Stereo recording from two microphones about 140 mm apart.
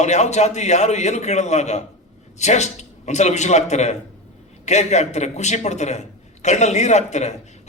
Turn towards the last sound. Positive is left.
turn(degrees=55)  # may be behind; listen again after turning